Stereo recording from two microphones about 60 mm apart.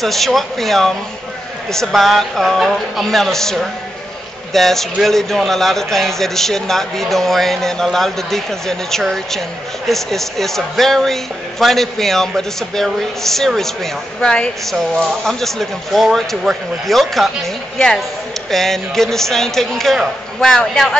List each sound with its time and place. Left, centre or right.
0.0 s a man's voice: centre
14.2 s a man's voice: centre